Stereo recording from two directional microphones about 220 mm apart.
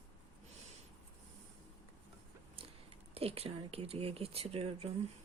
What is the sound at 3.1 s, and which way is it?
Speech, 25° right (ahead or behind).